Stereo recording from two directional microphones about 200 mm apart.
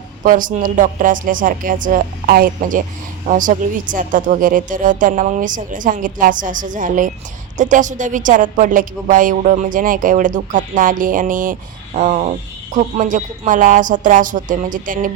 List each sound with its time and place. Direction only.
0.2 s a woman's voice: 40° right (ahead or behind)